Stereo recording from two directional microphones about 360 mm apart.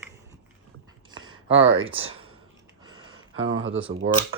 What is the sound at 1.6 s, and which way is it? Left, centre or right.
Speech, centre.